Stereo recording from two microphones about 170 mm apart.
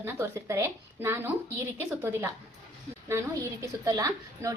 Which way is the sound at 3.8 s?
20° right (ahead or behind).